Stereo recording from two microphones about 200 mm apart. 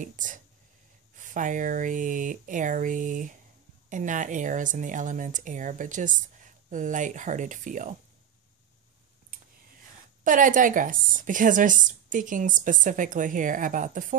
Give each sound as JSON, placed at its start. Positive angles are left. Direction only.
{"t": 0.0, "sound": "speech", "side_deg": -40}
{"t": 10.2, "sound": "speech", "side_deg": -40}